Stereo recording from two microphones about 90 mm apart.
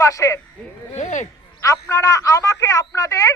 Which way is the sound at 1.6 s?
35° left (ahead or behind).